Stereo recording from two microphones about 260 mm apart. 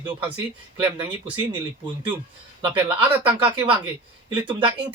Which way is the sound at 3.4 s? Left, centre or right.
Centre.